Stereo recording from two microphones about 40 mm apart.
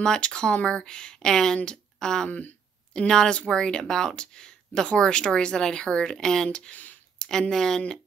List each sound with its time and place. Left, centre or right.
0.0 s speech: centre
2.2 s speech: left
3.1 s speech: centre
6.7 s speech: left
7.2 s speech: centre